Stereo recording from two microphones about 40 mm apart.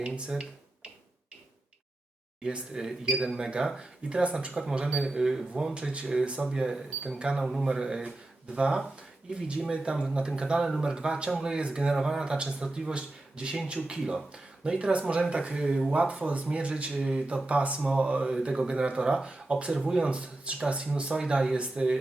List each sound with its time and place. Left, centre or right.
0.0 s speech: right
2.4 s speech: right
2.7 s speech: centre
5.7 s speech: right
6.4 s speech: centre
7.4 s speech: centre; by 21.9 s right